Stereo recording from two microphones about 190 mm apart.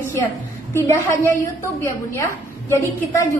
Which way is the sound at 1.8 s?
15° left (ahead or behind).